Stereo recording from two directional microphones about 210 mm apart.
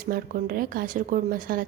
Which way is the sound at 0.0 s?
45° right (ahead or behind).